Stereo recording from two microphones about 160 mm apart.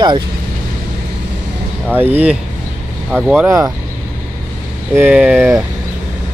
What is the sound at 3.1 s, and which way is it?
Speech, centre (ahead or behind).